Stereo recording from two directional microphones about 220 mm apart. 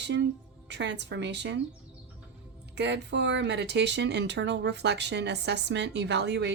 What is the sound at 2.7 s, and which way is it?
Speech, 50° right (ahead or behind).